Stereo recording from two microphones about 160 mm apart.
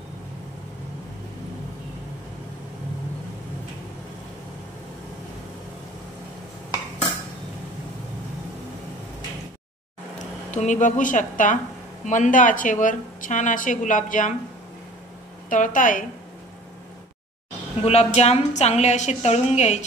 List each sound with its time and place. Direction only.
10.5 s a woman's voice: 50° left (ahead or behind)
15.5 s a woman's voice: 55° left (ahead or behind)
17.8 s a woman's voice: 40° left (ahead or behind)